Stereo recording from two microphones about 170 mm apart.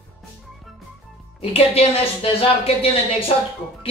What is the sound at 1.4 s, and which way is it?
Speech, 35° left (ahead or behind).